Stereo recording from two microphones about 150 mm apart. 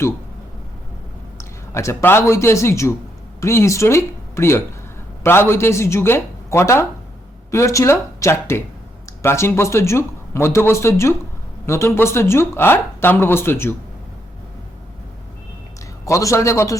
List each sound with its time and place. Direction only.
1.4 s speech: 20° left (ahead or behind)
16.0 s speech: 20° left (ahead or behind)